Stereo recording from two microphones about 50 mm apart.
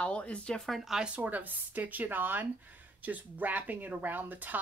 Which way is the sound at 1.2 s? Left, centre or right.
Right.